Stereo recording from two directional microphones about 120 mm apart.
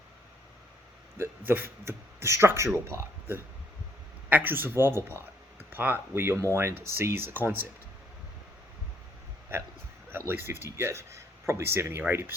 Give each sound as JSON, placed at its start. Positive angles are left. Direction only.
{"t": 1.2, "sound": "speech", "side_deg": -15}
{"t": 10.1, "sound": "speech", "side_deg": -20}